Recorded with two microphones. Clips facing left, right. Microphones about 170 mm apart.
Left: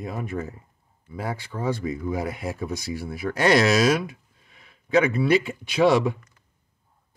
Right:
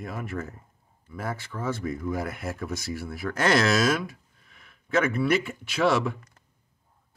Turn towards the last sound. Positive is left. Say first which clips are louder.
# left 5 dB
turn(degrees=15)  # may be behind; listen again after turning